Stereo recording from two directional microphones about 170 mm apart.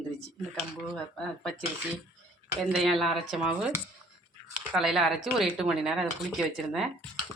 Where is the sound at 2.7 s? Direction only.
Centre (ahead or behind).